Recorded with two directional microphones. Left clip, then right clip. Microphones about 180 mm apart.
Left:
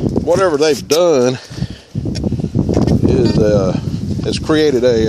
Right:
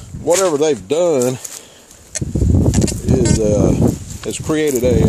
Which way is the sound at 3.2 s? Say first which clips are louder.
Left 1 dB; 5° left (ahead or behind).